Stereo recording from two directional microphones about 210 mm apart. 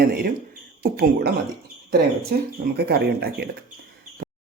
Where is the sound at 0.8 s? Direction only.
45° right (ahead or behind).